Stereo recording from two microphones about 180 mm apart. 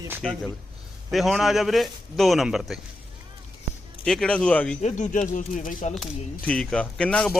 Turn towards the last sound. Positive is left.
turn(degrees=5)  # may be behind; listen again after turning